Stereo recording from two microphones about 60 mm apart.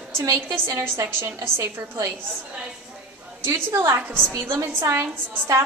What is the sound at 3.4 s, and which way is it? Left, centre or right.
A woman's voice, right.